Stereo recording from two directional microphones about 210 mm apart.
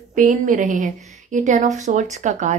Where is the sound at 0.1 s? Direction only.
40° right (ahead or behind).